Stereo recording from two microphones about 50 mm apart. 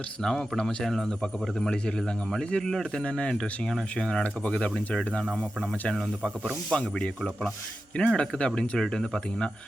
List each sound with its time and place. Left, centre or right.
0.2 s speech: centre
4.2 s speech: left